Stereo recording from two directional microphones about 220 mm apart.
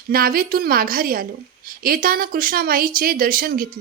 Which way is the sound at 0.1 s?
40° right (ahead or behind).